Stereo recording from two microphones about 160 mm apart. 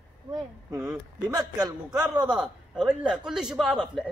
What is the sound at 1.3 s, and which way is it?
A man's voice, 25° right (ahead or behind).